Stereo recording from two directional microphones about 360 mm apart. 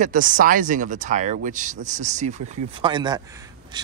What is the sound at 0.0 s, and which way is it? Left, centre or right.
Speech, right.